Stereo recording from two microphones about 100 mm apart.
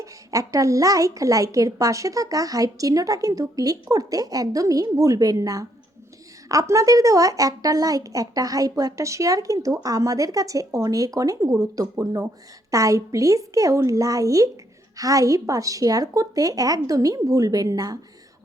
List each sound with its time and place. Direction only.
0.0 s a woman's voice: 35° right (ahead or behind)